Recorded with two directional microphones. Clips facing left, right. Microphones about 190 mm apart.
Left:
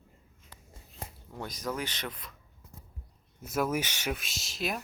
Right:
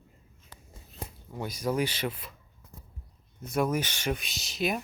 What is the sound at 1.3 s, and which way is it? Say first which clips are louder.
Speech: right 5 dB; 10° right (ahead or behind).